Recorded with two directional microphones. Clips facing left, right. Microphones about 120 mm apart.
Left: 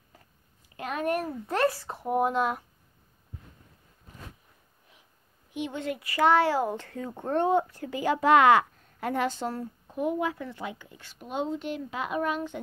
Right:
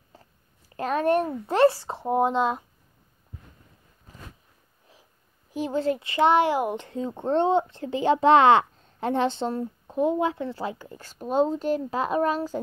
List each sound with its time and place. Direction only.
0.1 s a sound: 30° right (ahead or behind)
0.7 s speech: 40° right (ahead or behind)
5.5 s speech: 35° right (ahead or behind)